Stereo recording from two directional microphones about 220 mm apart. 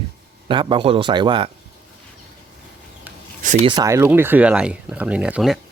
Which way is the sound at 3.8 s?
15° right (ahead or behind).